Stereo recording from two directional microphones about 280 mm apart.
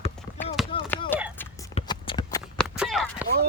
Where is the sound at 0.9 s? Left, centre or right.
Centre.